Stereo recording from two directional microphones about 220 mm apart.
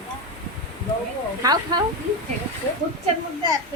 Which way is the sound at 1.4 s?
20° right (ahead or behind).